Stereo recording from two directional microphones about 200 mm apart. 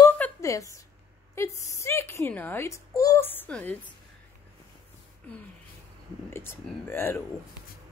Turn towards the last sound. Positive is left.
turn(degrees=10)  # may be behind; listen again after turning